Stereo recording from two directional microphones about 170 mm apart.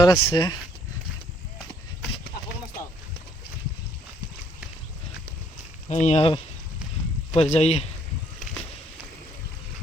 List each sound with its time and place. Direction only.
0.0 s speech: 30° left (ahead or behind)
5.9 s speech: 40° left (ahead or behind)